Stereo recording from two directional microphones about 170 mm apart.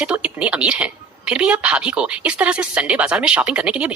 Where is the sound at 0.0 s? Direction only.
5° right (ahead or behind).